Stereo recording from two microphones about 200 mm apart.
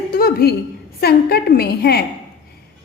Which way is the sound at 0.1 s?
50° left (ahead or behind).